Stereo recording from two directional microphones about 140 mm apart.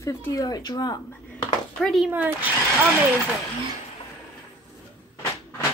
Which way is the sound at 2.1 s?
10° right (ahead or behind).